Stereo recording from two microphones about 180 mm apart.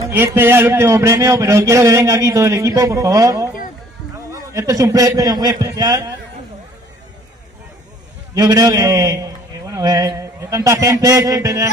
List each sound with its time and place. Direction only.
0.1 s a man's voice: 10° right (ahead or behind)
8.4 s a man's voice: 20° right (ahead or behind)